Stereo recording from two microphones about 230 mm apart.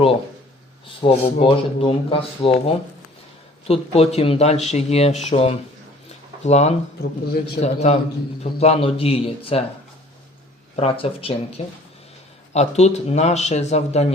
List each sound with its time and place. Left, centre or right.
0.9 s speech: left
6.1 s a sound: left
7.0 s a man's voice: left
7.6 s speech: left
10.8 s speech: left